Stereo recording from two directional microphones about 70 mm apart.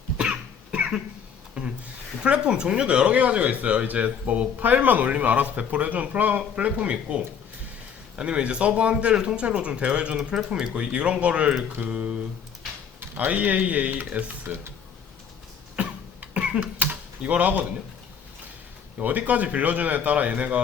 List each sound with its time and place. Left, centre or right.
0.2 s cough: centre
1.6 s speech: centre
8.2 s speech: centre
15.7 s cough: centre
18.9 s speech: right